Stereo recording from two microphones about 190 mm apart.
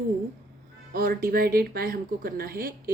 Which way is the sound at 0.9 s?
50° right (ahead or behind).